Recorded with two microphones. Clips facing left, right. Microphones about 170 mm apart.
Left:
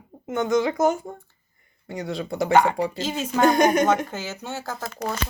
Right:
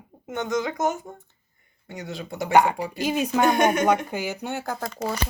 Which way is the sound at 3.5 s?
40° left (ahead or behind).